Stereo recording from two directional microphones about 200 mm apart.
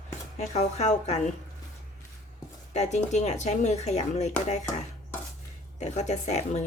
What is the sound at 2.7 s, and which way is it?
Speech, 35° left (ahead or behind).